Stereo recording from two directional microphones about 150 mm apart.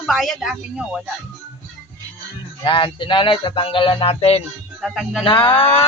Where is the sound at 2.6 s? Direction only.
35° left (ahead or behind).